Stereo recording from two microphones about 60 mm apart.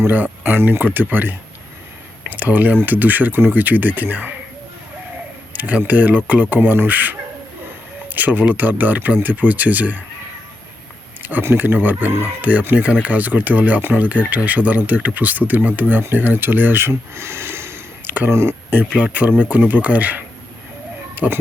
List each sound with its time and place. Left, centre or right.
0.1 s speech: right
5.5 s speech: right
8.4 s speech: right
11.2 s a sound: right
11.5 s speech: right
18.9 s speech: right